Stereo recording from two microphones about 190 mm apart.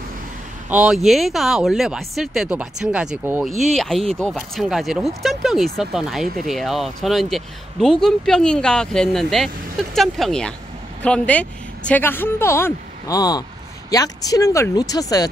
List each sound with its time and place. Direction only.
0.7 s speech: 5° right (ahead or behind); by 15.2 s 20° left (ahead or behind)